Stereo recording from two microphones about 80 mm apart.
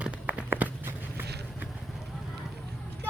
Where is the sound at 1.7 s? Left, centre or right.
Centre.